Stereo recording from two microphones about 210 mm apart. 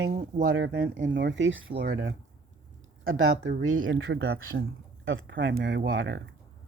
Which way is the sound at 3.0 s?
75° right (ahead or behind).